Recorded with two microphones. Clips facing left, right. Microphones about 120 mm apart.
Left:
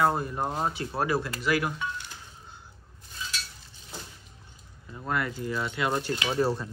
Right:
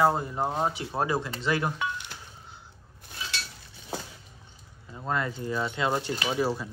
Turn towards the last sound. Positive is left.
turn(degrees=-5)  # may be behind; listen again after turning